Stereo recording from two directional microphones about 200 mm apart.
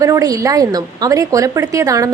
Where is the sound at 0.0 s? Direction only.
15° right (ahead or behind).